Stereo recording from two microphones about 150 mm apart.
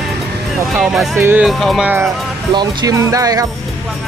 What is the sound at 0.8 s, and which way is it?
Speech, centre (ahead or behind).